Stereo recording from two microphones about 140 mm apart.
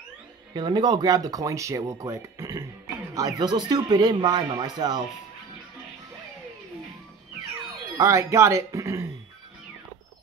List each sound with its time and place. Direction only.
0.6 s speech: 30° right (ahead or behind)
8.0 s speech: 20° right (ahead or behind)